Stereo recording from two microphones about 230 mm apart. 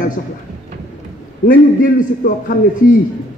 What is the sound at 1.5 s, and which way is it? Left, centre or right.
A woman's voice, left.